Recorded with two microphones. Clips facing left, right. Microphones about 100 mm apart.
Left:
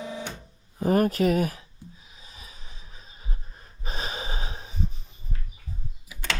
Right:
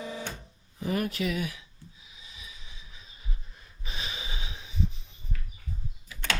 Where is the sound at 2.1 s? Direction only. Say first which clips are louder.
Left 2 dB; 40° left (ahead or behind).